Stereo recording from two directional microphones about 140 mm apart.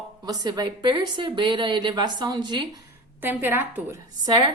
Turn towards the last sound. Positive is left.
turn(degrees=-30)  # may be behind; listen again after turning